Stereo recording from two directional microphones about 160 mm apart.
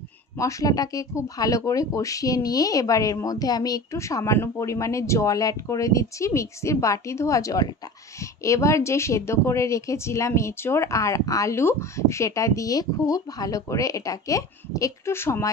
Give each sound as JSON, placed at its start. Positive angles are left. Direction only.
{"t": 0.4, "sound": "speech", "side_deg": 20}